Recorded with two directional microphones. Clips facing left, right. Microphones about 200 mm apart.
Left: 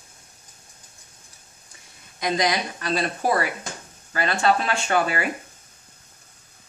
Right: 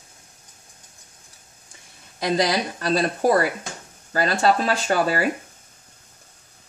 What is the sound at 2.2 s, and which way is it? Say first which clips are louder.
Speech: right 2 dB; 35° right (ahead or behind).